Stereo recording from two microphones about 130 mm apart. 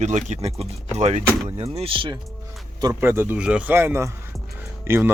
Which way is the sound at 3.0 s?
15° right (ahead or behind).